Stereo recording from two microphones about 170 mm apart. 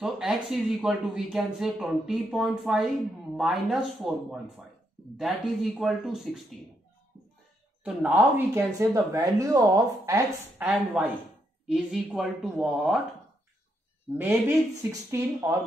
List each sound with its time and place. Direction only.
0.0 s speech: centre (ahead or behind)
7.8 s speech: 10° right (ahead or behind)
10.6 s speech: 10° right (ahead or behind)
14.1 s speech: 5° right (ahead or behind)
14.8 s speech: 15° right (ahead or behind)